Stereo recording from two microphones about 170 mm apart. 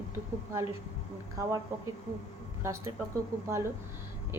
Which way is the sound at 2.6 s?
15° right (ahead or behind).